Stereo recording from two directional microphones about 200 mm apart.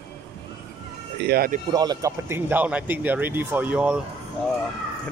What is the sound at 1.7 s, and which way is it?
Speech, 20° right (ahead or behind).